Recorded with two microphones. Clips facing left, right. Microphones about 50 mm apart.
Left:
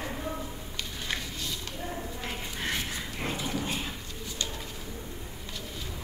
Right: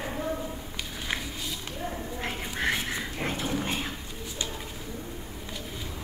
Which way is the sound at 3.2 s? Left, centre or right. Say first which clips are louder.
Right 2 dB; right.